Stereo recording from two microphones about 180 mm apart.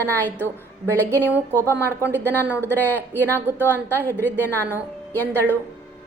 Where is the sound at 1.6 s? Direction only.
15° left (ahead or behind).